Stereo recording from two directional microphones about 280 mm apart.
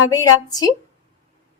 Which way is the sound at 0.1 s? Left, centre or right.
Centre.